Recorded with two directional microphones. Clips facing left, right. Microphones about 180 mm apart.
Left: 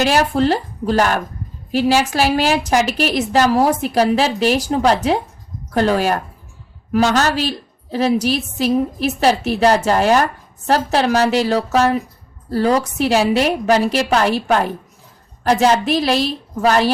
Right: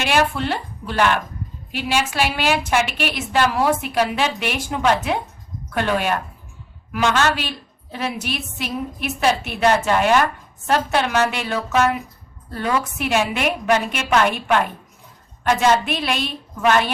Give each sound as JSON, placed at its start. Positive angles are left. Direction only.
{"t": 0.0, "sound": "a woman's voice", "side_deg": 40}